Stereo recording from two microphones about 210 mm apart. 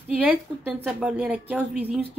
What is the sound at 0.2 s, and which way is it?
A woman's voice, 10° right (ahead or behind).